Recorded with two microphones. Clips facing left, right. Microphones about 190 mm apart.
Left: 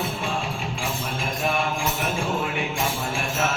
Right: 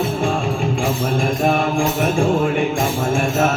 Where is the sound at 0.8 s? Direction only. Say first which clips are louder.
Right 10 dB; 45° right (ahead or behind).